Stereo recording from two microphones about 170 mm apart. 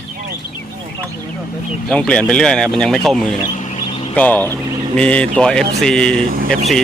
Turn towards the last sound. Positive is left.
turn(degrees=-60)  # may be behind; listen again after turning